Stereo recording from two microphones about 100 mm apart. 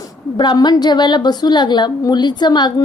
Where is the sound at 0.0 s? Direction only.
45° left (ahead or behind).